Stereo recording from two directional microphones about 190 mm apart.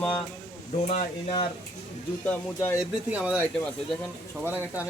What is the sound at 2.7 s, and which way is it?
Speech, 5° right (ahead or behind).